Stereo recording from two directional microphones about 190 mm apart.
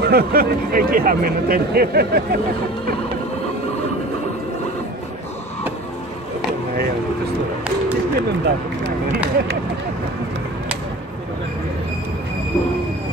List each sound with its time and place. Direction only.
0.0 s speech: 55° right (ahead or behind)
8.2 s speech: 60° right (ahead or behind)